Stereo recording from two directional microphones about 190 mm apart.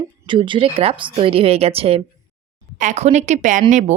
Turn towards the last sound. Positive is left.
turn(degrees=-40)  # may be behind; listen again after turning